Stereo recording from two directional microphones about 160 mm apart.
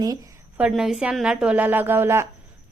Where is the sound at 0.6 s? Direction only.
5° right (ahead or behind).